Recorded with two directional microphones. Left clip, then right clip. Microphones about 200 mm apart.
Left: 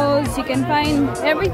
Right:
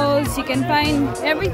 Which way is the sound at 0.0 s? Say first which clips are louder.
Left 1 dB; 10° right (ahead or behind).